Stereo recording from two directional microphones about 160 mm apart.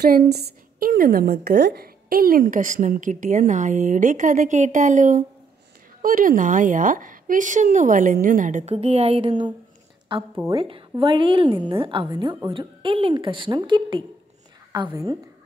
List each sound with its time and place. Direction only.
0.1 s a woman's voice: 90° right; by 8.7 s 55° right (ahead or behind)
8.7 s a woman's voice: 40° right (ahead or behind)